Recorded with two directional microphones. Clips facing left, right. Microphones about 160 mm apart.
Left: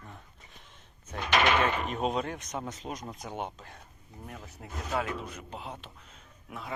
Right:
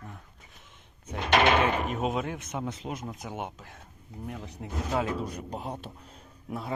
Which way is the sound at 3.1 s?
15° right (ahead or behind).